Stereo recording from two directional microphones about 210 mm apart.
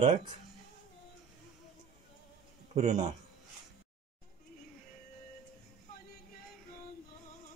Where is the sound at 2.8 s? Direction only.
30° right (ahead or behind).